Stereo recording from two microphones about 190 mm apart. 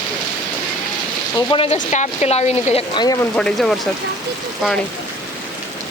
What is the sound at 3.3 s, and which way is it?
Speech, 5° left (ahead or behind).